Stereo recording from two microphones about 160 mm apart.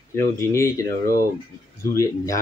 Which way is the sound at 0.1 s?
20° left (ahead or behind).